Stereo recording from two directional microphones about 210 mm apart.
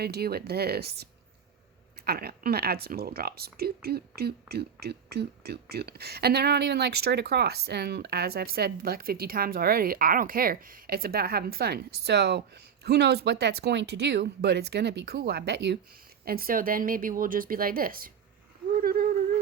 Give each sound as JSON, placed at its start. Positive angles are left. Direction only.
{"t": 0.0, "sound": "speech", "side_deg": -50}
{"t": 2.0, "sound": "speech", "side_deg": -45}
{"t": 18.8, "sound": "a sound", "side_deg": -45}